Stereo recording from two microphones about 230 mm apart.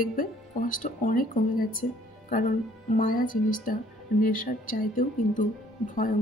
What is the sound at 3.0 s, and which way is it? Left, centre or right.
Speech, left.